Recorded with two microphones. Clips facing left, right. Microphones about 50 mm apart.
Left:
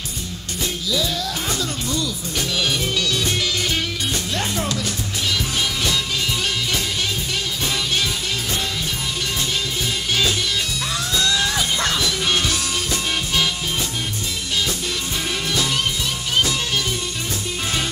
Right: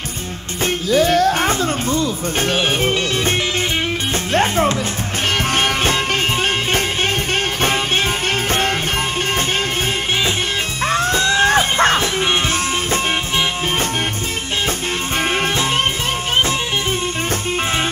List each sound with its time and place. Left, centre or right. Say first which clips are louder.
0.8 s music: right 12 dB; right
10.9 s music: right 7 dB; right